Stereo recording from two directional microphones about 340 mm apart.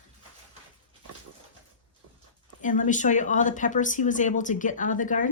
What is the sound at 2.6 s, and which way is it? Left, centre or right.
Speech, left.